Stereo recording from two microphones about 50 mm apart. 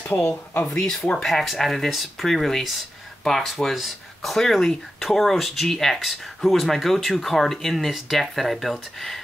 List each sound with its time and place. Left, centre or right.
0.0 s speech: left
1.1 s speech: centre